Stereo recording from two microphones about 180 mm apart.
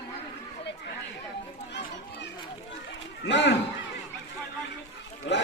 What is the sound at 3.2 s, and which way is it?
Speech, 80° left.